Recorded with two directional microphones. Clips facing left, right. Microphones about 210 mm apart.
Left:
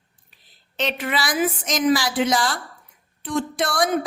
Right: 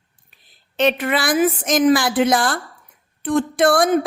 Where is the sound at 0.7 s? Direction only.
55° right (ahead or behind).